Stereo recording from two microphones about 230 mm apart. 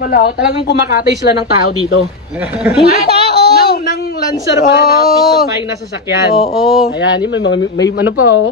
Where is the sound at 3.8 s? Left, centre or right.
Left.